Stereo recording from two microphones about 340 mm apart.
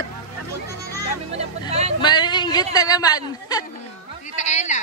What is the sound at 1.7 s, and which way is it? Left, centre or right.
Speech, centre.